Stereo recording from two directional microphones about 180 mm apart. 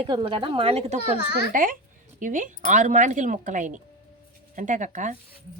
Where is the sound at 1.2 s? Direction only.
65° left (ahead or behind).